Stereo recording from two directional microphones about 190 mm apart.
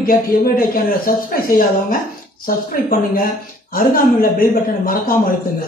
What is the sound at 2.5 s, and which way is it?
A woman's voice, 50° left (ahead or behind).